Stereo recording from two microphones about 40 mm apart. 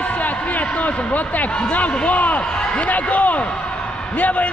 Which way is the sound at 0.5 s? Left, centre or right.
Left.